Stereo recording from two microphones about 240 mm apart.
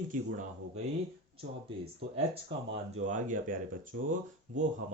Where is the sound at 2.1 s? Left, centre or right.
Right.